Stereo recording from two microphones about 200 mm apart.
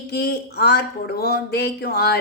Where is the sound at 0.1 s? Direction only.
55° left (ahead or behind).